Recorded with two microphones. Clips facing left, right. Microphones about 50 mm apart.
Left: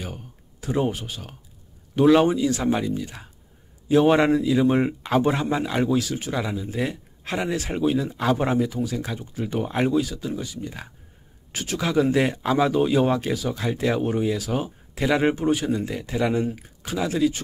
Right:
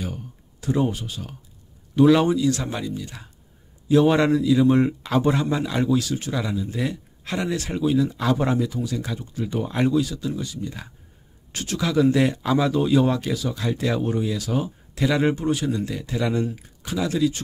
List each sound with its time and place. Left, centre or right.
0.6 s a man's voice: left